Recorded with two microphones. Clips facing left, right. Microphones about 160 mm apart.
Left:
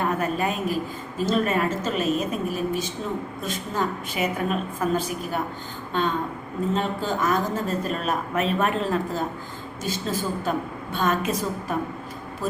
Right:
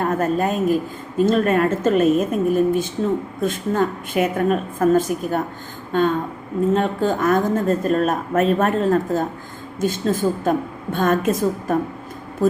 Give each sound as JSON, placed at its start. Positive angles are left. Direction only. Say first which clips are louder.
{"t": 0.0, "sound": "a woman's voice", "louder": "right 5 dB", "side_deg": -45}
{"t": 1.2, "sound": "a woman's voice", "louder": "right 6 dB", "side_deg": -55}